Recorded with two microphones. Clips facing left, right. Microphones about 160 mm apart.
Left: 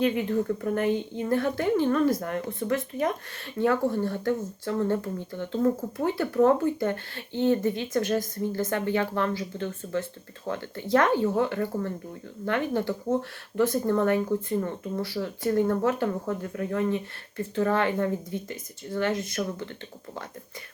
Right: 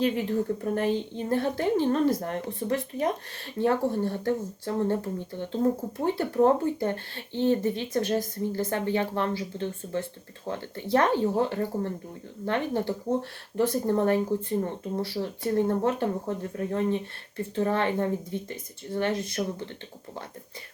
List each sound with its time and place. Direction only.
0.0 s a woman's voice: 30° right (ahead or behind)